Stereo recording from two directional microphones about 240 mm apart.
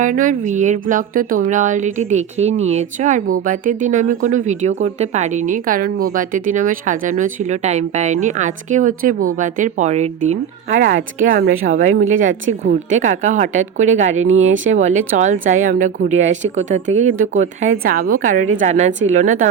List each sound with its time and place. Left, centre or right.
0.0 s speech: right
11.9 s speech: right
12.6 s speech: right
14.3 s speech: right
14.6 s speech: right